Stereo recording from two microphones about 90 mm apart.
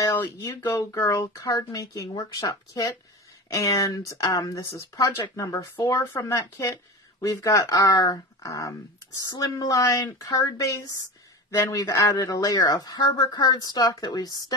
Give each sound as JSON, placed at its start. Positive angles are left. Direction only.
{"t": 0.0, "sound": "speech", "side_deg": 35}